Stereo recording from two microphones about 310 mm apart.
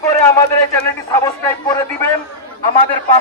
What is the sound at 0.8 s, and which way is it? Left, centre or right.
A man's voice, centre.